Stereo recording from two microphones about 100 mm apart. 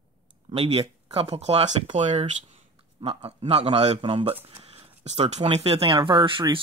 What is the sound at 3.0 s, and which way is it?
A man's voice, 90° right.